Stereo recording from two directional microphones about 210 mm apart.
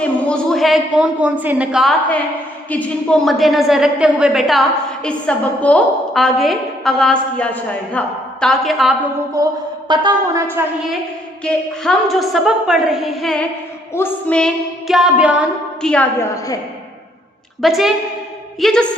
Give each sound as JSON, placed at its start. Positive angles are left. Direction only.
{"t": 0.0, "sound": "a woman's voice", "side_deg": 5}
{"t": 9.4, "sound": "a woman's voice", "side_deg": -15}
{"t": 11.4, "sound": "a woman's voice", "side_deg": 0}
{"t": 17.6, "sound": "a woman's voice", "side_deg": 0}